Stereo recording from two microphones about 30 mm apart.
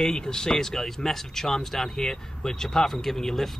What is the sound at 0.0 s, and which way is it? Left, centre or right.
Speech, left.